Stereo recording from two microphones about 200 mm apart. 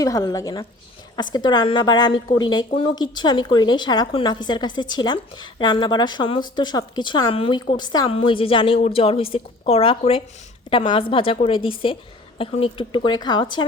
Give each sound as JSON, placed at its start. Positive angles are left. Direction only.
{"t": 0.0, "sound": "a woman's voice", "side_deg": 20}